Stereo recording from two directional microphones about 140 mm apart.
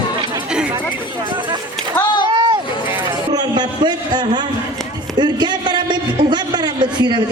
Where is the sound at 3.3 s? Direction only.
30° right (ahead or behind).